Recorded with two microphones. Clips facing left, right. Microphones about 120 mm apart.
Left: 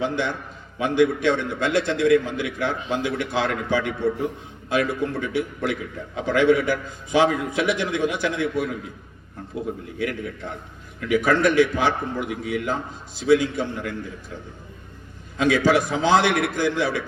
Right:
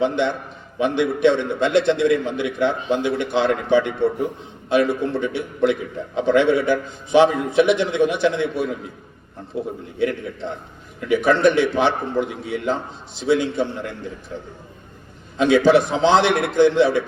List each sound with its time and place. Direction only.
0.0 s a man's voice: 20° right (ahead or behind)
10.0 s a man's voice: 25° right (ahead or behind)
15.4 s a man's voice: 25° right (ahead or behind)